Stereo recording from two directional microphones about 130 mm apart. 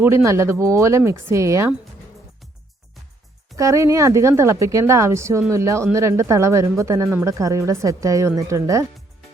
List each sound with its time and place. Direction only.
0.0 s speech: 20° right (ahead or behind)
3.5 s speech: 25° right (ahead or behind)